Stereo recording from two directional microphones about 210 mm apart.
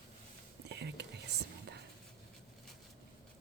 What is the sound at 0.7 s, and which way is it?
Whispering, 55° right (ahead or behind).